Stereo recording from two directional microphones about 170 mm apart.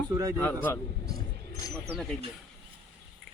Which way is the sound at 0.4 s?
15° left (ahead or behind).